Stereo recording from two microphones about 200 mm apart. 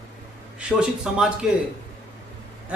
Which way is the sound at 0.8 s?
5° right (ahead or behind).